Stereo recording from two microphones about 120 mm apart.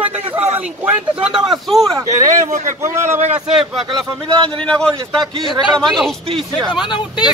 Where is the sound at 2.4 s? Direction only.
90° right.